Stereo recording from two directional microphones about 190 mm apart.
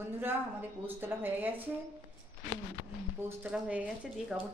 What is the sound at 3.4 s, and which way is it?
Speech, 5° right (ahead or behind).